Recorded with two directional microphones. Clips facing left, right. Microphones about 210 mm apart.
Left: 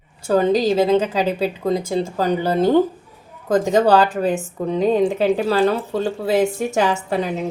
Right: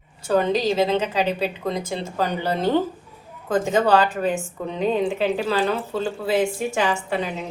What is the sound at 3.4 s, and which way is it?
A woman's voice, 40° left (ahead or behind).